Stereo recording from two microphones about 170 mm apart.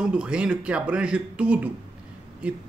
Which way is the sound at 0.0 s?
5° right (ahead or behind).